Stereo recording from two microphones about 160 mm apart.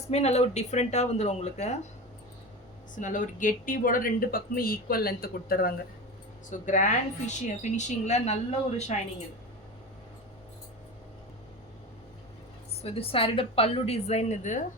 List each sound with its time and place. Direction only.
0.1 s a woman's voice: 40° left (ahead or behind)
2.9 s speech: 55° left (ahead or behind)
6.7 s a woman's voice: 50° left (ahead or behind)
12.8 s a woman's voice: 35° left (ahead or behind)